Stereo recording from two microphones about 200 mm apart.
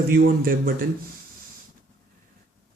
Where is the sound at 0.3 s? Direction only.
45° right (ahead or behind).